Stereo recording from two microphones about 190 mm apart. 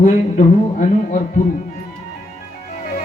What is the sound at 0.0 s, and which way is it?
Speech, 40° left (ahead or behind).